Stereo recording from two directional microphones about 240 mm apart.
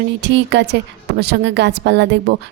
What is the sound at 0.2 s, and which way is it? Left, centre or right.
A woman's voice, right.